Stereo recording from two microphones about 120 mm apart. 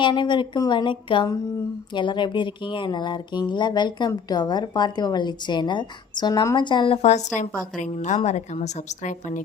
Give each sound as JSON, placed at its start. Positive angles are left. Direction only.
{"t": 0.0, "sound": "a woman's voice", "side_deg": 40}
{"t": 7.0, "sound": "a woman's voice", "side_deg": 80}